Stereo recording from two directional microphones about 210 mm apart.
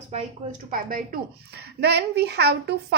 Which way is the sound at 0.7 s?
40° right (ahead or behind).